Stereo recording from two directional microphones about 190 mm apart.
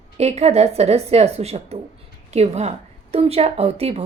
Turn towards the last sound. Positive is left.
turn(degrees=-35)  # may be behind; listen again after turning